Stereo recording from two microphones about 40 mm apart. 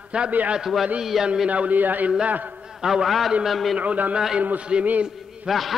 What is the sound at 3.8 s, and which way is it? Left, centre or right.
Speech, right.